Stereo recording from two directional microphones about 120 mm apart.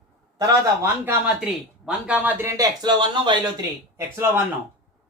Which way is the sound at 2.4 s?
35° right (ahead or behind).